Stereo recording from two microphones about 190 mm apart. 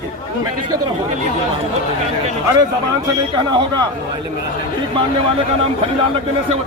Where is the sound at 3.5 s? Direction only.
25° right (ahead or behind).